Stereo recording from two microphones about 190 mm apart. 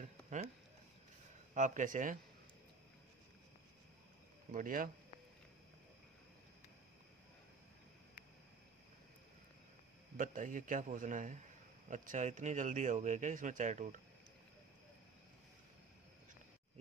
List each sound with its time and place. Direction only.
1.5 s speech: 40° right (ahead or behind)
4.5 s a man's voice: 45° right (ahead or behind)
10.1 s a man's voice: 45° right (ahead or behind)